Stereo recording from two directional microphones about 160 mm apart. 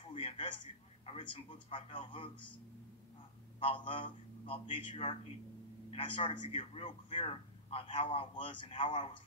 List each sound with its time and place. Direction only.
0.0 s speech: 35° left (ahead or behind)
3.5 s a man's voice: 30° left (ahead or behind)